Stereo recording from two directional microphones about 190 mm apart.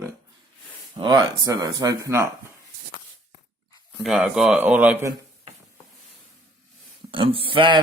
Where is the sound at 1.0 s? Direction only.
20° right (ahead or behind).